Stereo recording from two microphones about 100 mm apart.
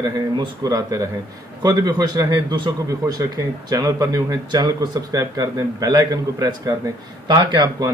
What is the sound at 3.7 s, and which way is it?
Speech, 35° right (ahead or behind).